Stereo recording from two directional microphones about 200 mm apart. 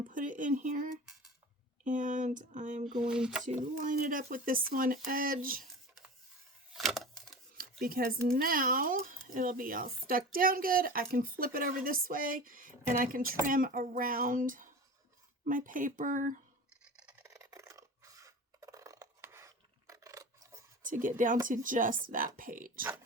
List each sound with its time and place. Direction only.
0.0 s speech: 40° right (ahead or behind)
3.0 s speech: 5° right (ahead or behind)
3.8 s speech: 40° right (ahead or behind)
6.7 s a sound: centre (ahead or behind)
7.5 s speech: 45° right (ahead or behind)
16.8 s scratch: 5° right (ahead or behind)
17.2 s scissors: 15° right (ahead or behind)
20.8 s speech: 40° right (ahead or behind)